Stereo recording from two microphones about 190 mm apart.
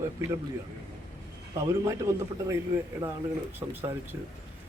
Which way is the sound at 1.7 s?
15° right (ahead or behind).